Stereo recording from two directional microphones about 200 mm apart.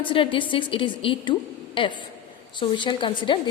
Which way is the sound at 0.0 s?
25° left (ahead or behind).